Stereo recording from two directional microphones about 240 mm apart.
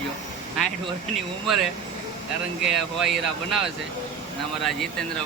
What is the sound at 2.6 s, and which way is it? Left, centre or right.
Speech, centre.